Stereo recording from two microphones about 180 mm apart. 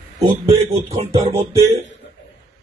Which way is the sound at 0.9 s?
35° right (ahead or behind).